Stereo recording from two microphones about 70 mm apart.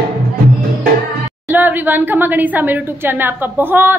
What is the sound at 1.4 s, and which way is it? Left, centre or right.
A woman's voice, right.